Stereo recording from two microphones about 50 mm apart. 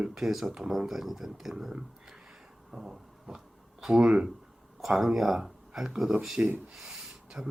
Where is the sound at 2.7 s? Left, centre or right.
Centre.